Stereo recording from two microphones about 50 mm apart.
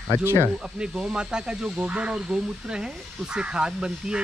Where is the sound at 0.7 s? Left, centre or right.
Centre.